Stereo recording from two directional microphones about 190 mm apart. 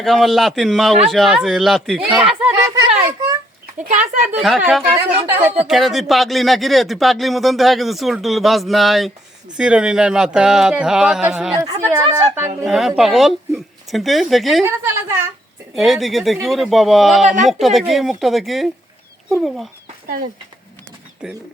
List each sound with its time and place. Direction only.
0.0 s speech: centre (ahead or behind)
2.6 s a sound: 15° right (ahead or behind)
3.8 s speech: 40° right (ahead or behind)
4.4 s speech: centre (ahead or behind)
5.6 s speech: centre (ahead or behind)
12.6 s speech: centre (ahead or behind)
14.6 s speech: 15° right (ahead or behind)
15.7 s speech: centre (ahead or behind)